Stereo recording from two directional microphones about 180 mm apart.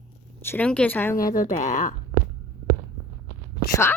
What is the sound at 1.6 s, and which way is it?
Speech, 40° left (ahead or behind).